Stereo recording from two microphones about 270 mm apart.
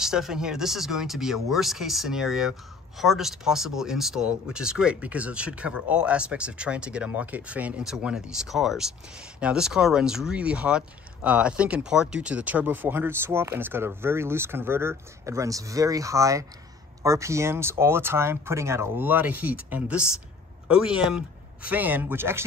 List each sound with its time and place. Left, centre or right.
0.0 s speech: centre